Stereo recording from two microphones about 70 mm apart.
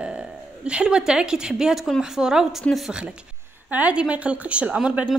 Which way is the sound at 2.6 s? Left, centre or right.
Centre.